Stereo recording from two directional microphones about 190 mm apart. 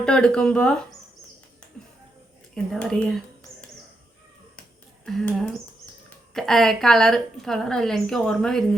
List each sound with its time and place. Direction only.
0.0 s a woman's voice: 5° left (ahead or behind)
2.7 s a woman's voice: 5° left (ahead or behind)
5.0 s a woman's voice: centre (ahead or behind)